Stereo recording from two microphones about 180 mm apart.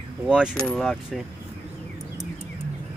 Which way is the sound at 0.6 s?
5° left (ahead or behind).